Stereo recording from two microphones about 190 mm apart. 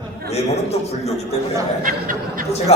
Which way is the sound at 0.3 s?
35° left (ahead or behind).